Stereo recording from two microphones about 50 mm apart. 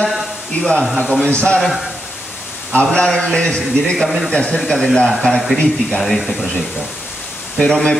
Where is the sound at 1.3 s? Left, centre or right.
Left.